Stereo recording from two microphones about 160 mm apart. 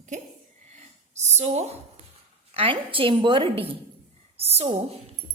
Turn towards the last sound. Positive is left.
turn(degrees=-40)  # may be behind; listen again after turning